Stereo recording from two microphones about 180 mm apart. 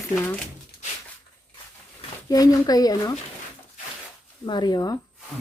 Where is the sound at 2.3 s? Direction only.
20° left (ahead or behind).